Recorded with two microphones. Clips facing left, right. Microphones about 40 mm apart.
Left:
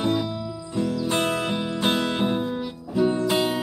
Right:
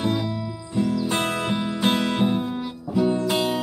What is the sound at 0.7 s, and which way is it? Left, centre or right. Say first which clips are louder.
Music: right 1 dB; centre.